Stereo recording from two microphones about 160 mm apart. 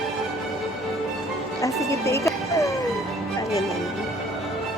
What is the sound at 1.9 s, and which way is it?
Music, 20° left (ahead or behind).